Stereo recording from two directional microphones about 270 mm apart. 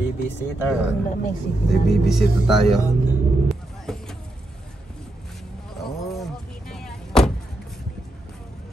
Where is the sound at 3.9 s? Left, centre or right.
Centre.